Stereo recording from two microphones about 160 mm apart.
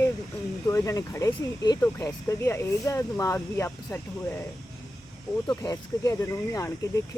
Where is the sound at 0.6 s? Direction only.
20° left (ahead or behind).